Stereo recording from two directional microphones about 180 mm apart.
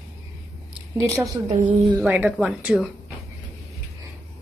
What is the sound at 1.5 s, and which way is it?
Speech, 40° right (ahead or behind).